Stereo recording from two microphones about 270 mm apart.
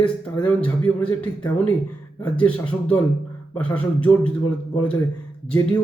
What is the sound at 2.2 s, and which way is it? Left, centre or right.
A man's voice, centre.